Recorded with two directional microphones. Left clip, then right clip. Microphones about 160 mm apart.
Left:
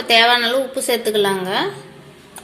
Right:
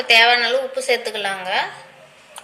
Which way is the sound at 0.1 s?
55° left (ahead or behind).